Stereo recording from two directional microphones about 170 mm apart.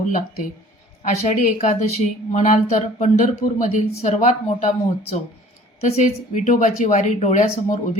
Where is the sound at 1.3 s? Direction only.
45° left (ahead or behind).